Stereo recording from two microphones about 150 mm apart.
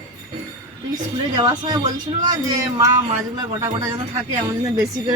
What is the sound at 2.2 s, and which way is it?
Speech, 25° right (ahead or behind).